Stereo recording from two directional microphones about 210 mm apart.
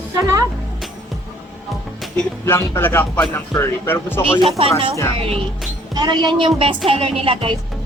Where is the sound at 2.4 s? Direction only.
15° left (ahead or behind).